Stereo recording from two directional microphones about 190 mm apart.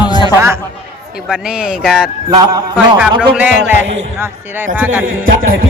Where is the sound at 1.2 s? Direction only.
5° right (ahead or behind).